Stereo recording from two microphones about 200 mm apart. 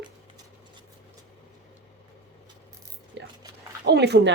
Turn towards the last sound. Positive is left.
turn(degrees=-55)  # may be behind; listen again after turning